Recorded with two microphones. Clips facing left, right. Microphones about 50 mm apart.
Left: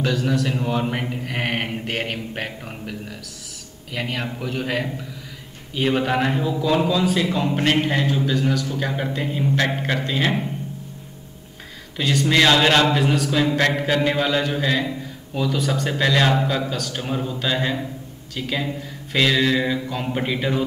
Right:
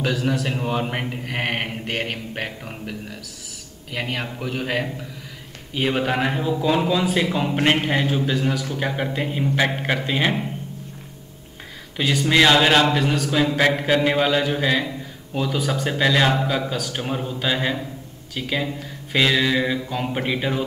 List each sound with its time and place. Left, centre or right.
0.0 s speech: centre
1.1 s mantra: centre
5.8 s a man's voice: centre
12.0 s speech: centre
12.9 s mantra: centre
13.6 s speech: centre